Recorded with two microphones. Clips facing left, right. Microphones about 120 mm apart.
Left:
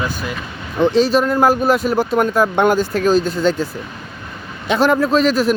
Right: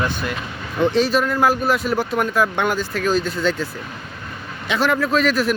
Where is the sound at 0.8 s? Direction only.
35° left (ahead or behind).